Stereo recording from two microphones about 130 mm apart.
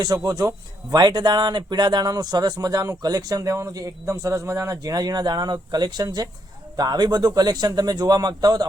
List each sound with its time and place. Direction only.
0.0 s speech: 30° right (ahead or behind)